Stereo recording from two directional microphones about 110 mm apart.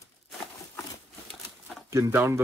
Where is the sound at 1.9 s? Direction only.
25° right (ahead or behind).